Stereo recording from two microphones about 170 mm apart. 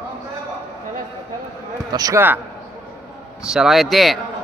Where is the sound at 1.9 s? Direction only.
20° right (ahead or behind).